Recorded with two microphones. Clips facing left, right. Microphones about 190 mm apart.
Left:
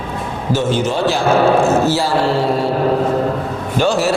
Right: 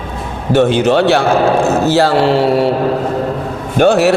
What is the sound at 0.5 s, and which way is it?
Speech, 65° right (ahead or behind).